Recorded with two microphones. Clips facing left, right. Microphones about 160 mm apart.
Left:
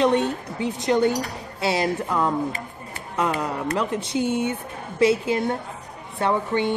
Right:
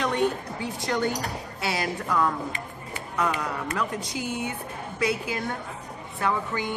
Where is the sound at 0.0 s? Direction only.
20° left (ahead or behind).